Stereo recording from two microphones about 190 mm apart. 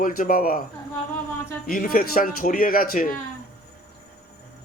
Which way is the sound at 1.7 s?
50° left (ahead or behind).